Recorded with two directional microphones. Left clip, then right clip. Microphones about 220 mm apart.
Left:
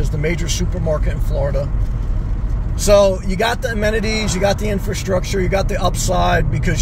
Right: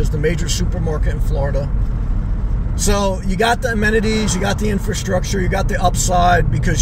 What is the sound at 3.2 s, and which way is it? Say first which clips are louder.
Speech: right 2 dB; 15° right (ahead or behind).